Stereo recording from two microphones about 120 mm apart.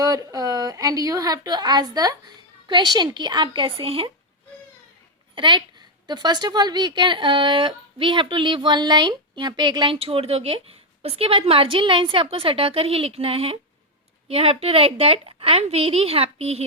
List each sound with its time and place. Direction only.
0.0 s a woman's voice: 30° right (ahead or behind); by 4.1 s 50° right (ahead or behind)
5.3 s speech: 40° right (ahead or behind); by 16.6 s 60° right (ahead or behind)